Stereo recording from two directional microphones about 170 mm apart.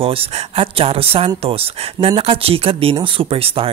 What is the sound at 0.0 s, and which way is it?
Speech, 35° right (ahead or behind).